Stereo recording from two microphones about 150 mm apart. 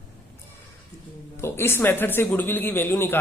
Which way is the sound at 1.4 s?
15° left (ahead or behind).